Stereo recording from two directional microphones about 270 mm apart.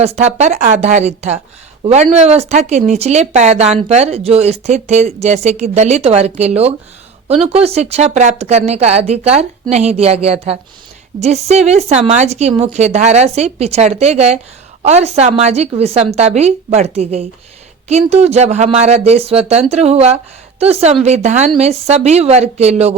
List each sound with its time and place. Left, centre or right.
0.0 s speech: right